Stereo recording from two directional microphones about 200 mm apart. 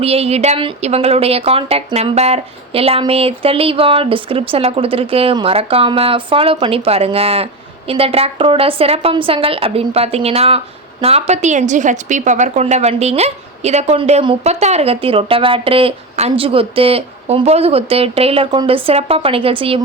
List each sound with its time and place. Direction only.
0.0 s a woman's voice: 30° right (ahead or behind)